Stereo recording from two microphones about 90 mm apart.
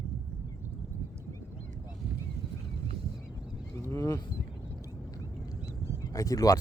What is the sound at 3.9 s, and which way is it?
Speech, 40° left (ahead or behind).